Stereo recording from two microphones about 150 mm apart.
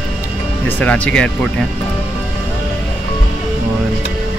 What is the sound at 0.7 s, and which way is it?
Speech, 10° left (ahead or behind).